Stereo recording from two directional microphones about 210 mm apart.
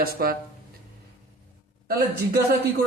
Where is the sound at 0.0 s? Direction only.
45° right (ahead or behind).